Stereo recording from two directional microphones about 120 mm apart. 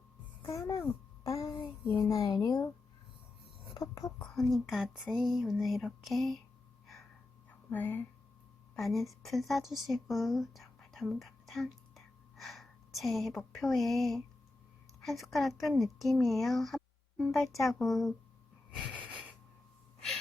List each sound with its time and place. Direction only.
0.4 s a woman's voice: 30° left (ahead or behind)
2.0 s a sound: 30° left (ahead or behind)
3.8 s whispering: 30° left (ahead or behind)
4.5 s a woman's voice: centre (ahead or behind)
7.7 s speech: 15° left (ahead or behind)
8.7 s a woman's voice: centre (ahead or behind)